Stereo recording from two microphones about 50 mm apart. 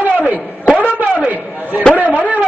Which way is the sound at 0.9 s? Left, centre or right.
Right.